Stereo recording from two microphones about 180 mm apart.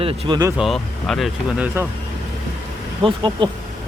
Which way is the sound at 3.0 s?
25° right (ahead or behind).